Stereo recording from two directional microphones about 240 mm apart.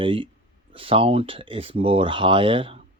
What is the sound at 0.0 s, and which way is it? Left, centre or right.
Speech, right.